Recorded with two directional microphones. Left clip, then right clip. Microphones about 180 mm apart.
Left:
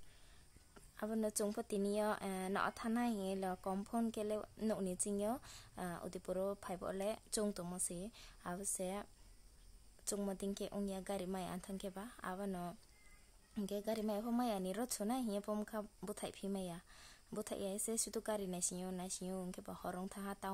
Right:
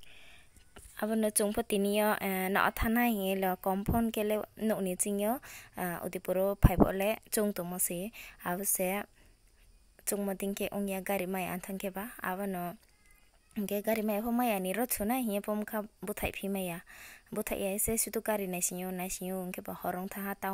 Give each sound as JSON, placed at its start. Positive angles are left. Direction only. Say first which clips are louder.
{"t": 0.7, "sound": "a woman's voice", "louder": "right 9 dB", "side_deg": -25}